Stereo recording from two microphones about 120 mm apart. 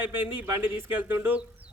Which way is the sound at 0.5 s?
15° right (ahead or behind).